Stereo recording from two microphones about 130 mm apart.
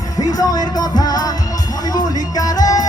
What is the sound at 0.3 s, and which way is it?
Music, 30° left (ahead or behind).